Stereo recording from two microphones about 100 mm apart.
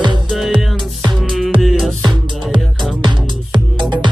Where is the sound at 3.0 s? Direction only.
50° right (ahead or behind).